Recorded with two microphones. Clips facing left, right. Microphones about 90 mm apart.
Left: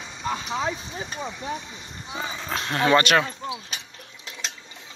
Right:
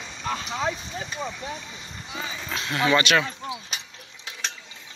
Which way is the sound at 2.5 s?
40° left (ahead or behind).